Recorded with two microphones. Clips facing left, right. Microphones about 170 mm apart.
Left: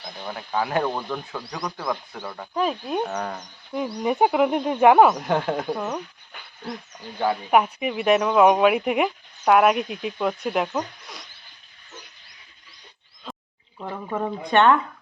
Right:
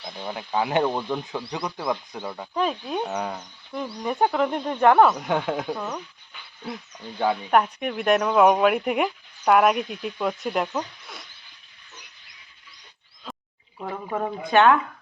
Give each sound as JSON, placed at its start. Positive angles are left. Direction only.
{"t": 0.3, "sound": "speech", "side_deg": -20}
{"t": 2.2, "sound": "speech", "side_deg": -10}
{"t": 2.5, "sound": "speech", "side_deg": 5}
{"t": 3.1, "sound": "speech", "side_deg": -10}
{"t": 3.7, "sound": "speech", "side_deg": 15}
{"t": 5.2, "sound": "speech", "side_deg": 0}
{"t": 5.7, "sound": "speech", "side_deg": 15}
{"t": 7.5, "sound": "speech", "side_deg": 5}
{"t": 13.8, "sound": "speech", "side_deg": 0}